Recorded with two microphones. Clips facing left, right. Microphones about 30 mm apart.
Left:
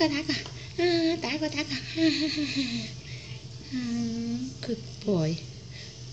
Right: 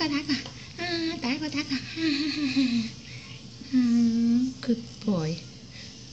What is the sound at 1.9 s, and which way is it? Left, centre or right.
Speech, left.